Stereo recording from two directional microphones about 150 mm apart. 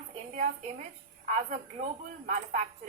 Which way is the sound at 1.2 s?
55° right (ahead or behind).